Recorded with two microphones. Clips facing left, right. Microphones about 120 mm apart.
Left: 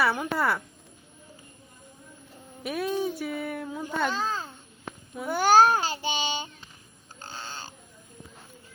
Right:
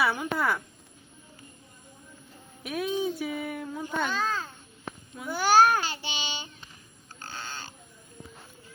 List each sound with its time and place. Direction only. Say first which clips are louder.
0.0 s speech: left 1 dB; centre (ahead or behind)
2.6 s speech: left 1 dB; centre (ahead or behind)
4.1 s a child's voice: even; 35° left (ahead or behind)
5.2 s child singing: left 2 dB; 50° left (ahead or behind)
7.2 s crow: even; 35° left (ahead or behind)